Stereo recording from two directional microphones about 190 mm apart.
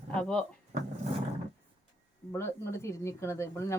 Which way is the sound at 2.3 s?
15° left (ahead or behind).